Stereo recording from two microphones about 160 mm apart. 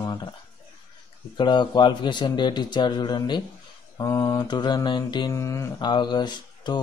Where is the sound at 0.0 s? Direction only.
25° left (ahead or behind).